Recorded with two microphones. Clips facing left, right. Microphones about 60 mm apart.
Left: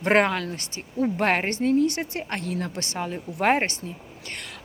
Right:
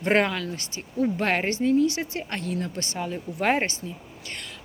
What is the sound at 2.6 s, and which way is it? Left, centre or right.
Speech, left.